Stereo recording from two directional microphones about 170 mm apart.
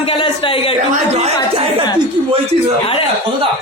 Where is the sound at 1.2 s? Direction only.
35° right (ahead or behind).